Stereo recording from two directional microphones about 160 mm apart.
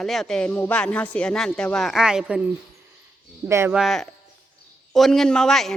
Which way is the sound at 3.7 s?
Centre (ahead or behind).